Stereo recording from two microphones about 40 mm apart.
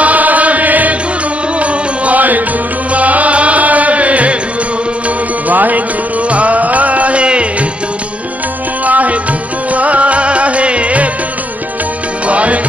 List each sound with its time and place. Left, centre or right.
0.0 s chant: right
1.6 s music: right
5.5 s music: right
8.8 s music: right
12.3 s music: right